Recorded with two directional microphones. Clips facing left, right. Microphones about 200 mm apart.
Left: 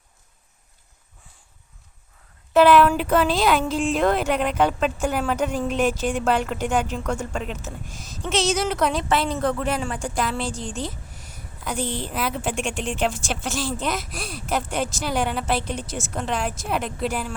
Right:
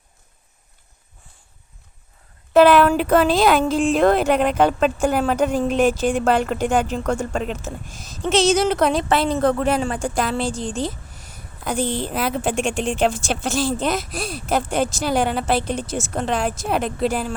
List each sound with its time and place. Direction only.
2.5 s speech: 50° right (ahead or behind)
4.0 s a woman's voice: 35° right (ahead or behind)
7.0 s speech: 50° right (ahead or behind)
7.4 s a woman's voice: 30° right (ahead or behind)